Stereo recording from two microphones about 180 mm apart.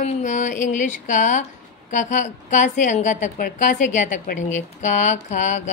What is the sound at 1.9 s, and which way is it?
A woman's voice, 45° left (ahead or behind).